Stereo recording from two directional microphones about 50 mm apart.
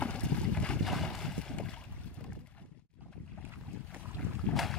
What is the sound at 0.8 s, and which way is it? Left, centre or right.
Boat, centre.